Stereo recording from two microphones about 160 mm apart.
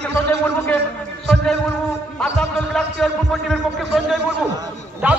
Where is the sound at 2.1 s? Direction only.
5° left (ahead or behind).